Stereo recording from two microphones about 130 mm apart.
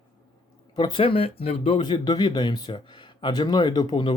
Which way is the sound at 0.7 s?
35° left (ahead or behind).